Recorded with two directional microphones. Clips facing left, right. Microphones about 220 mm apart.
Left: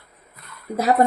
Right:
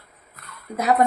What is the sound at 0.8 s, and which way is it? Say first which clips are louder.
Speech: left 1 dB; 35° left (ahead or behind).